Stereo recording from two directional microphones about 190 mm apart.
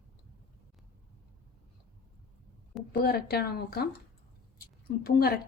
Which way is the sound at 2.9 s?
55° left (ahead or behind).